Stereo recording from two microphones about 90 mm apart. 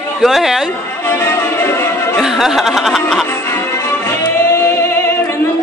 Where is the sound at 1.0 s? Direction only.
30° left (ahead or behind).